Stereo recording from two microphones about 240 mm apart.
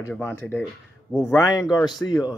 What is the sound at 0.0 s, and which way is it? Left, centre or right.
A man's voice, centre.